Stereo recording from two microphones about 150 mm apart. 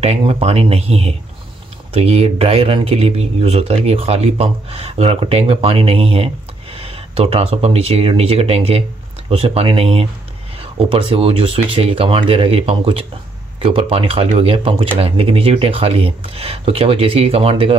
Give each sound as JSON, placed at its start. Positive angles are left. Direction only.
{"t": 0.0, "sound": "speech", "side_deg": -45}